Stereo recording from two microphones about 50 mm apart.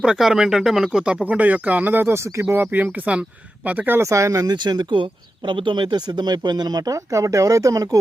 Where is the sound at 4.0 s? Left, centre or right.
Right.